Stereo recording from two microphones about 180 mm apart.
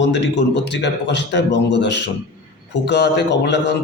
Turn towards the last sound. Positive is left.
turn(degrees=75)  # may be behind; listen again after turning